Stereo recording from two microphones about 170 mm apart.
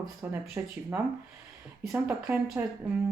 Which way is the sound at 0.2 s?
15° right (ahead or behind).